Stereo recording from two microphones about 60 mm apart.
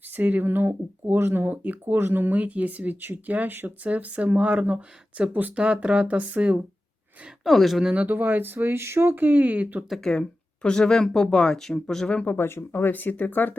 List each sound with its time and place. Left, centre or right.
0.1 s speech: right
5.5 s speech: centre
7.4 s speech: centre
8.0 s speech: right
10.0 s speech: centre
12.1 s speech: left
12.4 s speech: left
12.9 s speech: left